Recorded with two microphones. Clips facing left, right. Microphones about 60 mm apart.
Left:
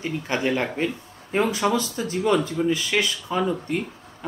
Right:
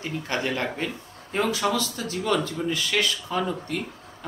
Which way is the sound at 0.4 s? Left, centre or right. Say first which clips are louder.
Left 5 dB; centre.